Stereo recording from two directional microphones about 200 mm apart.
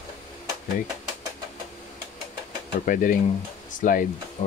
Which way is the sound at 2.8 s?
40° left (ahead or behind).